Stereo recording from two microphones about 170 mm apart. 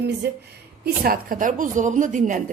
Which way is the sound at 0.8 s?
60° right (ahead or behind).